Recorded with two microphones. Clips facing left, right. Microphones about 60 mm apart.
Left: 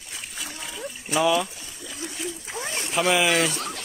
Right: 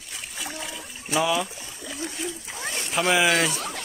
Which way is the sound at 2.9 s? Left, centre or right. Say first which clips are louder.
Even; centre.